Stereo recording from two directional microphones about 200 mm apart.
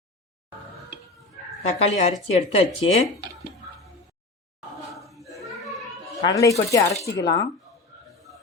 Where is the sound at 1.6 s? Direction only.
35° left (ahead or behind).